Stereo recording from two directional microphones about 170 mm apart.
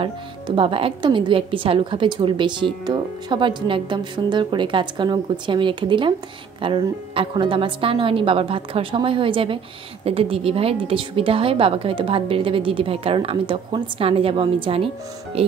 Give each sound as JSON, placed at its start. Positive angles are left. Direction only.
{"t": 0.0, "sound": "a woman's voice", "side_deg": -30}